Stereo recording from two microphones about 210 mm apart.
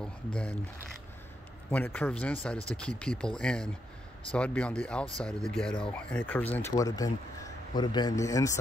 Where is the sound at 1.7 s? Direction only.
10° left (ahead or behind).